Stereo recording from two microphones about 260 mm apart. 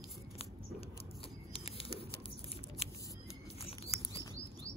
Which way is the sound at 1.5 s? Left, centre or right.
Left.